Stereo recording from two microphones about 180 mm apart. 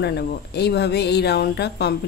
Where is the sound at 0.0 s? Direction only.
65° left (ahead or behind).